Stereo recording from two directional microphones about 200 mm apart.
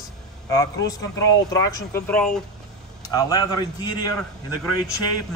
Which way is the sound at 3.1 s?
20° left (ahead or behind).